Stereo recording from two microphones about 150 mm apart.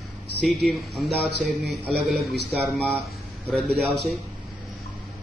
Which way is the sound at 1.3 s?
90° right.